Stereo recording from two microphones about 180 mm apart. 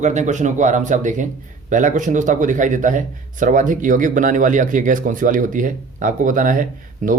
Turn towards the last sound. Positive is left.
turn(degrees=-45)  # may be behind; listen again after turning